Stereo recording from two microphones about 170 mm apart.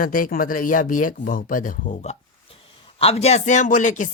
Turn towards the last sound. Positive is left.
turn(degrees=45)  # may be behind; listen again after turning